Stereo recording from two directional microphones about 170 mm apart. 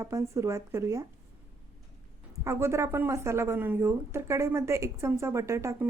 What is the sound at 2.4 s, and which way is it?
Speech, 15° right (ahead or behind).